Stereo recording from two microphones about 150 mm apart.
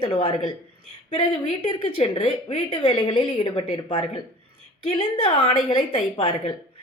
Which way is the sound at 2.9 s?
35° left (ahead or behind).